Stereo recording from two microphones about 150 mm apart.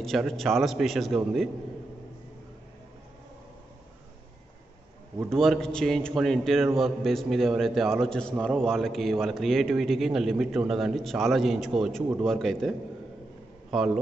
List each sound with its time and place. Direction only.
0.0 s a man's voice: centre (ahead or behind)
5.3 s a man's voice: 5° left (ahead or behind)